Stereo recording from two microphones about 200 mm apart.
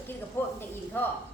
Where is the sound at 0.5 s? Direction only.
10° left (ahead or behind).